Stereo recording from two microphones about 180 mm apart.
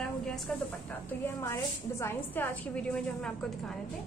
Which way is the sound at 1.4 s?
15° left (ahead or behind).